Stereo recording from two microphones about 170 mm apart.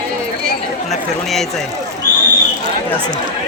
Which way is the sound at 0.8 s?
Centre (ahead or behind).